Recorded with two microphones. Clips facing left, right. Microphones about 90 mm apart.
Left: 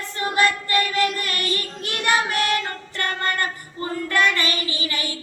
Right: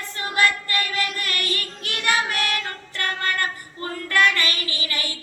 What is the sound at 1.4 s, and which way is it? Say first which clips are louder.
Child singing: left 3 dB; 30° left (ahead or behind).